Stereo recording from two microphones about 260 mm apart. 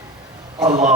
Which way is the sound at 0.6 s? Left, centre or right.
Right.